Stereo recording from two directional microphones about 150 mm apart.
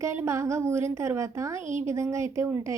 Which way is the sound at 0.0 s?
20° right (ahead or behind).